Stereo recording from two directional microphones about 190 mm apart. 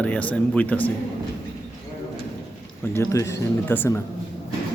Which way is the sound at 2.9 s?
15° left (ahead or behind).